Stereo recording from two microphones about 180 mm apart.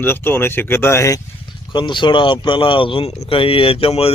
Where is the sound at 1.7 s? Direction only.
25° left (ahead or behind).